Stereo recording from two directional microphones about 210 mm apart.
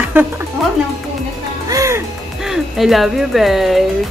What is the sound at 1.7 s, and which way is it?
Music, 15° right (ahead or behind).